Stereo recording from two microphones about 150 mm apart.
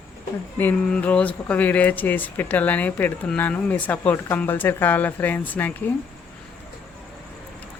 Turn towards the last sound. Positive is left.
turn(degrees=10)  # may be behind; listen again after turning